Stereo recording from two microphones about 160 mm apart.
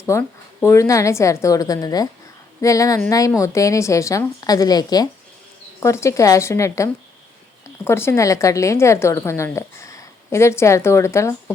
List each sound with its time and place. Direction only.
0.0 s a woman's voice: 15° left (ahead or behind)